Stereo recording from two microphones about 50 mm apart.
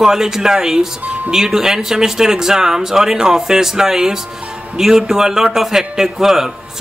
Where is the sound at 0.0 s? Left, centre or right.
Centre.